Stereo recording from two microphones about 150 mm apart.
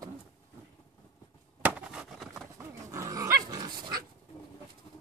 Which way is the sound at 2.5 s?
20° right (ahead or behind).